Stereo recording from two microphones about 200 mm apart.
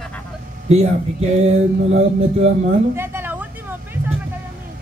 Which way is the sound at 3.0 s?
10° right (ahead or behind).